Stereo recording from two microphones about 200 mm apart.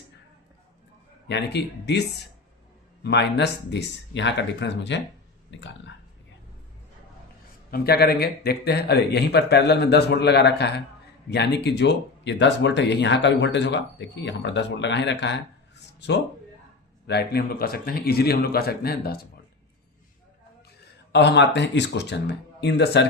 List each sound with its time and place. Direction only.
1.3 s speech: 60° left (ahead or behind)
7.7 s speech: 50° left (ahead or behind)
21.1 s speech: 60° left (ahead or behind)